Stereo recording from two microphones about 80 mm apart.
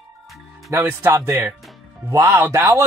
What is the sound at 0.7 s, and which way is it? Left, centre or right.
Speech, right.